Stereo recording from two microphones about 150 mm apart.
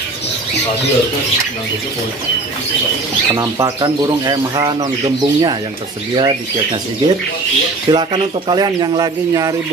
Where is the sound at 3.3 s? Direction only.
20° right (ahead or behind).